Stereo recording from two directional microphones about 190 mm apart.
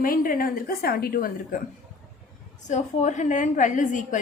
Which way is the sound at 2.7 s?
40° left (ahead or behind).